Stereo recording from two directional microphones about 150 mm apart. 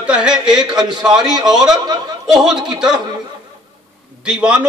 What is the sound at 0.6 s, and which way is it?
Speech, 25° right (ahead or behind).